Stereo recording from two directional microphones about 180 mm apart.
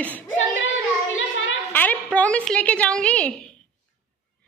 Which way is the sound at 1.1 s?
90° left.